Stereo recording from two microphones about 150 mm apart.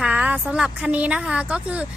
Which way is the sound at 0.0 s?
10° right (ahead or behind).